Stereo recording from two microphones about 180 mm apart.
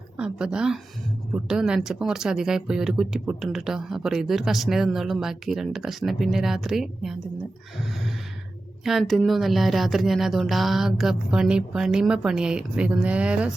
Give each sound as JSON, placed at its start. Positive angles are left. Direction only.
{"t": 0.2, "sound": "speech", "side_deg": -5}
{"t": 8.8, "sound": "speech", "side_deg": 0}